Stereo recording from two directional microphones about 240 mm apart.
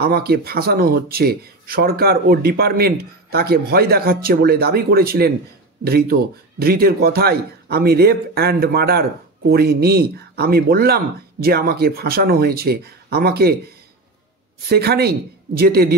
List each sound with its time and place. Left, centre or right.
0.0 s speech: right
14.7 s speech: right